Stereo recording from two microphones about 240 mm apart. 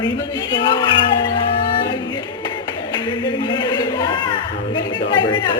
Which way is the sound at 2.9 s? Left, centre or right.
Centre.